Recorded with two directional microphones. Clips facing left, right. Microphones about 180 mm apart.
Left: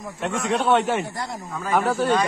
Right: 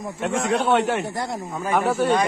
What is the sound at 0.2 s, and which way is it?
A man's voice, centre (ahead or behind).